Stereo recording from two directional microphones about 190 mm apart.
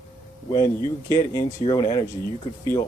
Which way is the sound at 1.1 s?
20° left (ahead or behind).